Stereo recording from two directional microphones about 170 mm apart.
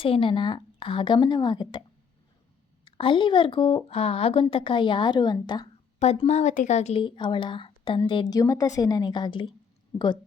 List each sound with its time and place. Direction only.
0.0 s a woman's voice: 30° left (ahead or behind)
2.8 s a woman's voice: 30° left (ahead or behind)
6.0 s speech: 40° left (ahead or behind)
7.0 s a woman's voice: 30° left (ahead or behind)